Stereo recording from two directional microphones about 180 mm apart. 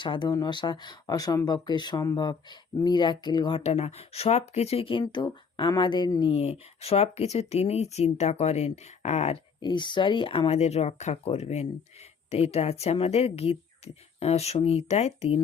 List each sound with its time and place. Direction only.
0.0 s speech: 25° left (ahead or behind)
9.6 s speech: 25° left (ahead or behind)